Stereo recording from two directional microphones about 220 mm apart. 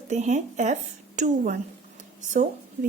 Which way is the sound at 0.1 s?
30° right (ahead or behind).